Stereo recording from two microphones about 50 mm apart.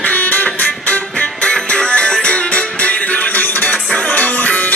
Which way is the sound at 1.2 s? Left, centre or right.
Left.